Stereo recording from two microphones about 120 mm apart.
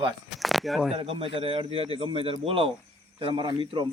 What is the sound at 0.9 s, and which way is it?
A man's voice, 50° right (ahead or behind).